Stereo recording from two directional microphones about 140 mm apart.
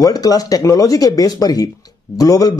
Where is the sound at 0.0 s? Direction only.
25° left (ahead or behind).